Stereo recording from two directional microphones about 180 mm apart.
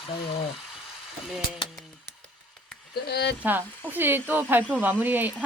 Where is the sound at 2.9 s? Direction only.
65° left (ahead or behind).